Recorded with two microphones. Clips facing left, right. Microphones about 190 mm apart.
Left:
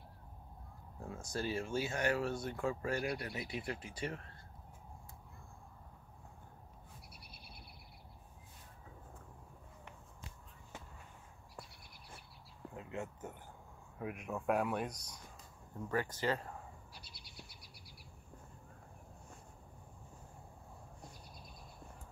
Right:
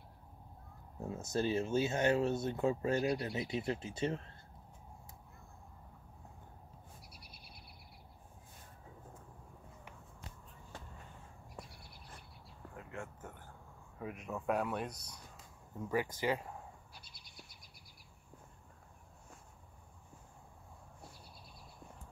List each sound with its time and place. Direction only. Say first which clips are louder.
0.9 s speech: right 5 dB; 20° right (ahead or behind)
12.7 s a sound: left 3 dB; 20° left (ahead or behind)
13.9 s speech: left 1 dB; 5° left (ahead or behind)
15.9 s speech: right 1 dB; 10° right (ahead or behind)